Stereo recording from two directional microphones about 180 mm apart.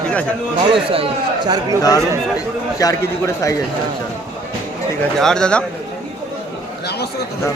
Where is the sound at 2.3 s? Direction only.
20° left (ahead or behind).